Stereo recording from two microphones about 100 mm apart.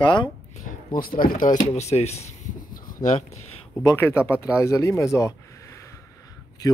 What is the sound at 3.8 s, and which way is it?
Speech, 25° left (ahead or behind).